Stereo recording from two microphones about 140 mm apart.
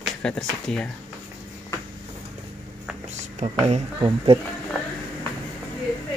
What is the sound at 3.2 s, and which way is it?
Speech, 55° right (ahead or behind).